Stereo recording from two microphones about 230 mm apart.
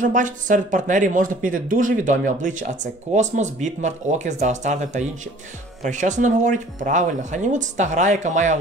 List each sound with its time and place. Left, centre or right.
0.0 s speech: right